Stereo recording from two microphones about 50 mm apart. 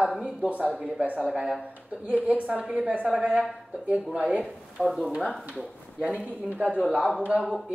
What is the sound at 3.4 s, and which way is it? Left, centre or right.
A woman's voice, right.